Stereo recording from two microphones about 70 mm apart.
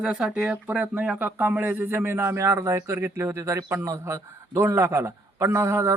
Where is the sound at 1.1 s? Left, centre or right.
Right.